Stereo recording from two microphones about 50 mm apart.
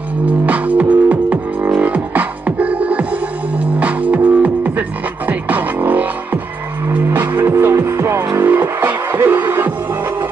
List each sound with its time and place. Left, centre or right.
0.5 s music: right
7.1 s music: right
7.9 s music: right
8.5 s music: right